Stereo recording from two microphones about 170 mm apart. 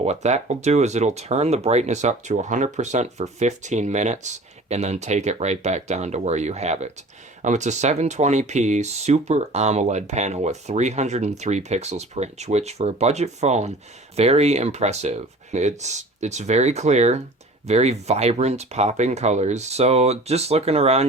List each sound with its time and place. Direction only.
0.0 s speech: 40° right (ahead or behind)